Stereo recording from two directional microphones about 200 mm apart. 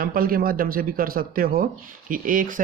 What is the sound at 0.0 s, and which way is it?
A man's voice, 45° right (ahead or behind).